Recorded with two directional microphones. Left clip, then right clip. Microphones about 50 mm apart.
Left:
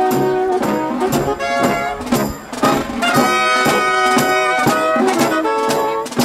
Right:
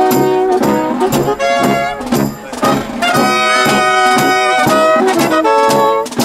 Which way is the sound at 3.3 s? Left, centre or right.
Right.